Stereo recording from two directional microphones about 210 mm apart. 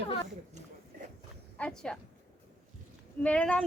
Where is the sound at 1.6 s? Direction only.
5° left (ahead or behind).